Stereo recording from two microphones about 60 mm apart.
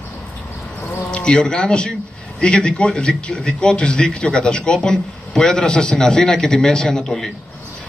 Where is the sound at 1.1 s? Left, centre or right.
Centre.